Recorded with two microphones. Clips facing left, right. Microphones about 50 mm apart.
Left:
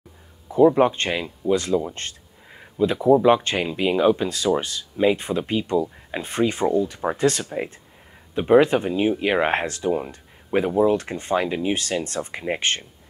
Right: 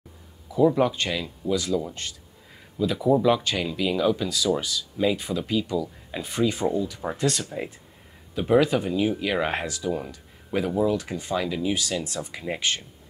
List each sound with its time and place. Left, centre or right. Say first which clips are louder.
0.5 s speech: left 5 dB; left
2.8 s speech: left 5 dB; left